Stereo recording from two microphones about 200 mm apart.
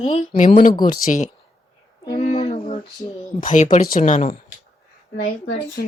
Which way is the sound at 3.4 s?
40° left (ahead or behind).